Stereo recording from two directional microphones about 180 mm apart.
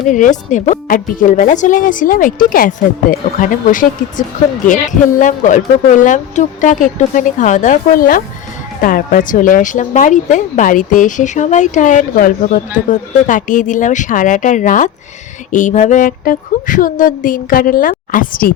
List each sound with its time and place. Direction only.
0.1 s speech: 45° left (ahead or behind)